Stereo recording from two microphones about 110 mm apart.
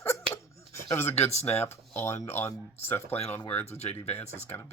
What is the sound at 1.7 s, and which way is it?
Speech, 25° left (ahead or behind).